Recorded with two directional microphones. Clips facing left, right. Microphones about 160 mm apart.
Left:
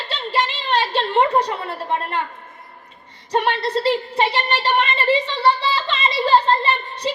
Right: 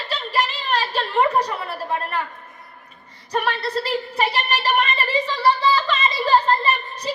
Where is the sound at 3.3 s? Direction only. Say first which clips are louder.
Left 3 dB; 30° left (ahead or behind).